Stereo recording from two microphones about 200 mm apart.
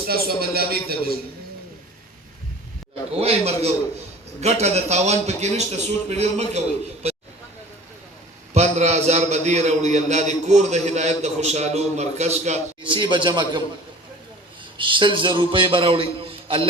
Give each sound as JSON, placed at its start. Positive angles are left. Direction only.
{"t": 0.3, "sound": "a sound", "side_deg": -50}
{"t": 3.2, "sound": "a man's voice", "side_deg": -30}
{"t": 8.5, "sound": "a man's voice", "side_deg": -35}
{"t": 14.8, "sound": "a man's voice", "side_deg": -25}